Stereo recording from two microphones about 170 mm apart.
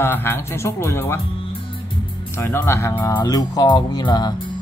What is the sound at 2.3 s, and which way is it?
Speech, 15° left (ahead or behind).